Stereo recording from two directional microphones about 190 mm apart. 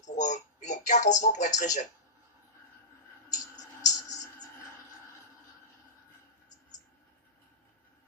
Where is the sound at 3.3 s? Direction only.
20° left (ahead or behind).